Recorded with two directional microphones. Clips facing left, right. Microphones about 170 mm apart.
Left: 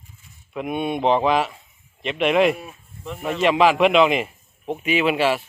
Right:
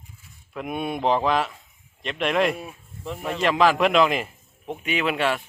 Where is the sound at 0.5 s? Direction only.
Centre (ahead or behind).